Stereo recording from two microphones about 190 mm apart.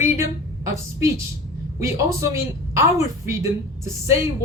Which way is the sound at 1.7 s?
15° right (ahead or behind).